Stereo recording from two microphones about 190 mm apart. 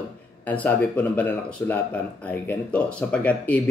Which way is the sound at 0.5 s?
5° left (ahead or behind).